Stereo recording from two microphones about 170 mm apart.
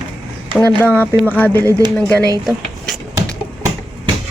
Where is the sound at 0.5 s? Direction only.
10° left (ahead or behind).